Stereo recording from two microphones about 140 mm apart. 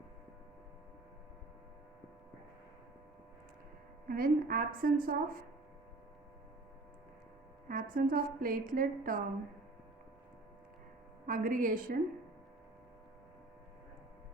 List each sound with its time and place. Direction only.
4.1 s a woman's voice: 90° right
7.7 s a woman's voice: 80° right
11.3 s a woman's voice: 80° right